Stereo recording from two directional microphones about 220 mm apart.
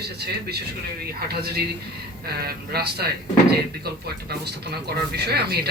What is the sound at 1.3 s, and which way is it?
Speech, 45° right (ahead or behind).